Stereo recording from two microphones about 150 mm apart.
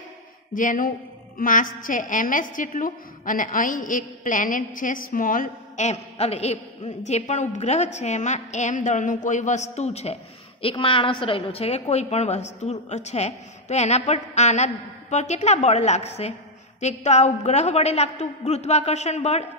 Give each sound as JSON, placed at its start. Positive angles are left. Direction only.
{"t": 0.6, "sound": "a woman's voice", "side_deg": 65}